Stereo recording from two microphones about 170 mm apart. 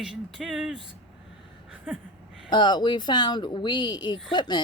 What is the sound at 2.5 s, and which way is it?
Speech, 25° left (ahead or behind).